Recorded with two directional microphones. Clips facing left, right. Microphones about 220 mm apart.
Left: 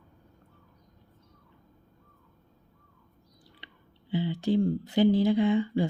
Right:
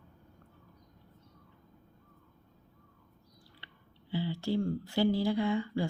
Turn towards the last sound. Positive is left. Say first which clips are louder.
# left 6 dB
turn(degrees=20)  # may be behind; listen again after turning